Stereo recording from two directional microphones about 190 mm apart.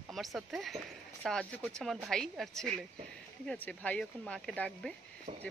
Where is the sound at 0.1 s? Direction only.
Centre (ahead or behind).